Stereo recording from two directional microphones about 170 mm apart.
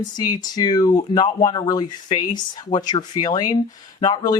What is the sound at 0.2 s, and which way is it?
Speech, 25° left (ahead or behind).